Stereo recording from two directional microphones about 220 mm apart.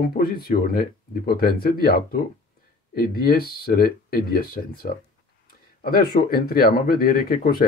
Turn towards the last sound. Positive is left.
turn(degrees=40)  # may be behind; listen again after turning